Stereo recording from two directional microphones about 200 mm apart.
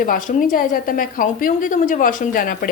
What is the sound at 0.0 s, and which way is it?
A woman's voice, 40° left (ahead or behind).